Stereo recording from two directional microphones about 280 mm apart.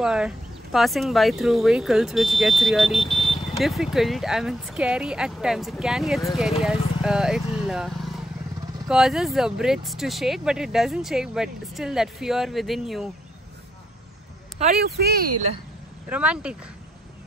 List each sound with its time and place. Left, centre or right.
0.0 s speech: centre
14.6 s speech: right
16.1 s speech: centre